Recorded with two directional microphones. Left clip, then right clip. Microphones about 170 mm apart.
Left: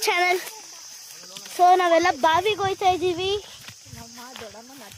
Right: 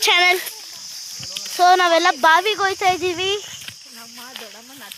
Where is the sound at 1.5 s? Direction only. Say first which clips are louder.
Right 3 dB; 5° right (ahead or behind).